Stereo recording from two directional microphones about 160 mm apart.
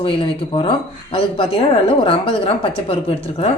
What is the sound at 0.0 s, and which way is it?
Speech, 35° left (ahead or behind).